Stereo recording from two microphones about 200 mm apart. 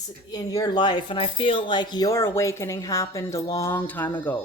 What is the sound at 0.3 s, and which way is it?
Speech, 20° left (ahead or behind).